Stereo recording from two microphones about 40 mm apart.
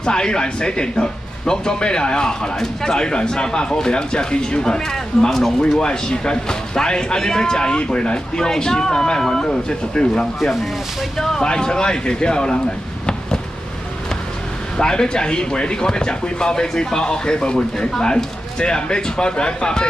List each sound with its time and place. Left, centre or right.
0.0 s speech: left
14.8 s speech: centre